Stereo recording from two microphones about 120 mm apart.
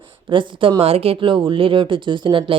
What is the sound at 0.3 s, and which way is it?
Speech, 45° right (ahead or behind).